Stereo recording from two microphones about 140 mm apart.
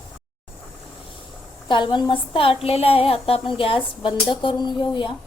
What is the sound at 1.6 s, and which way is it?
A woman's voice, 35° left (ahead or behind).